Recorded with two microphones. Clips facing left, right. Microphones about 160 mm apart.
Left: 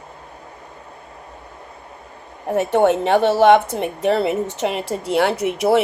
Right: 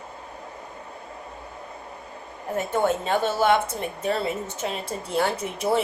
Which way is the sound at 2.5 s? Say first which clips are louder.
Left 8 dB; 65° left (ahead or behind).